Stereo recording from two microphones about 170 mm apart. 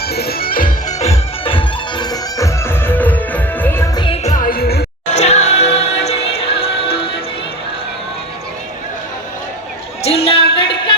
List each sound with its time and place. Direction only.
0.0 s music: 65° left (ahead or behind)
0.9 s music: 40° left (ahead or behind); by 3.8 s 10° left (ahead or behind)
3.9 s music: 30° left (ahead or behind); by 4.9 s 65° left (ahead or behind)
5.1 s music: 40° left (ahead or behind)
10.0 s a sound: 35° left (ahead or behind)